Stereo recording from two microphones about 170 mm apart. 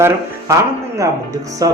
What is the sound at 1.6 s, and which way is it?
Music, 20° right (ahead or behind).